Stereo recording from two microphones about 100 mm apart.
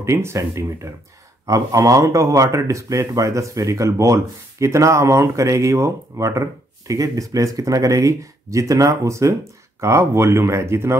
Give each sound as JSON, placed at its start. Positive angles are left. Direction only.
{"t": 0.0, "sound": "speech", "side_deg": -30}